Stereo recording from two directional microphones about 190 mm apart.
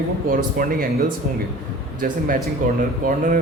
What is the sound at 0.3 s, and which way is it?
Speech, 50° right (ahead or behind).